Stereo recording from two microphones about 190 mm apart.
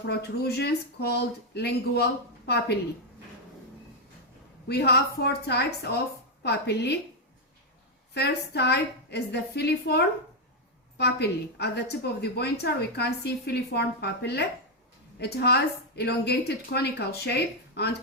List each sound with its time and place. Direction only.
0.1 s a woman's voice: 60° left (ahead or behind)
4.7 s a woman's voice: 60° left (ahead or behind)
8.1 s a woman's voice: 60° left (ahead or behind)